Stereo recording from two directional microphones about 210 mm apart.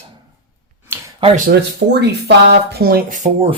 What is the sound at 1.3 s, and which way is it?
Speech, 45° right (ahead or behind).